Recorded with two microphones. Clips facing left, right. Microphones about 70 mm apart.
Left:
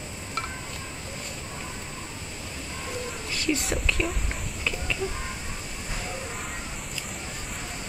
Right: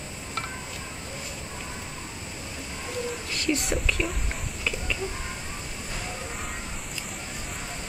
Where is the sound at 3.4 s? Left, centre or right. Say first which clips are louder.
Even; centre.